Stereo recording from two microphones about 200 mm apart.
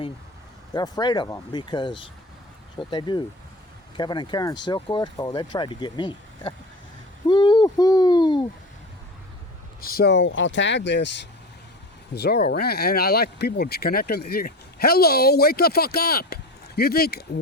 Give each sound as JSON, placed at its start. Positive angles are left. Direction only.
{"t": 0.7, "sound": "speech", "side_deg": 20}
{"t": 9.8, "sound": "speech", "side_deg": 50}
{"t": 12.1, "sound": "speech", "side_deg": 55}